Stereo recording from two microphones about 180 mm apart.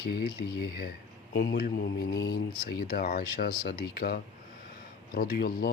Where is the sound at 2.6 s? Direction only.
60° left (ahead or behind).